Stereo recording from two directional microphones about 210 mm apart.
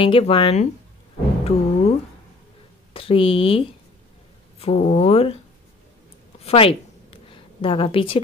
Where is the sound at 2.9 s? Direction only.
25° left (ahead or behind).